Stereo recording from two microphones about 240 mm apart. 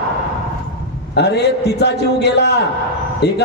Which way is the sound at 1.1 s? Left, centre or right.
Left.